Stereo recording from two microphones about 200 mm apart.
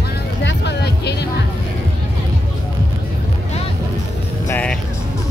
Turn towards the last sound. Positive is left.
turn(degrees=10)  # may be behind; listen again after turning